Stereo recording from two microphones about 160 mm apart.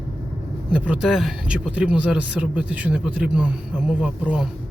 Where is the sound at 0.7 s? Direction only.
5° right (ahead or behind).